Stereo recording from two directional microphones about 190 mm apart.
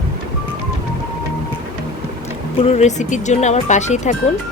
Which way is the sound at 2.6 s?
35° left (ahead or behind).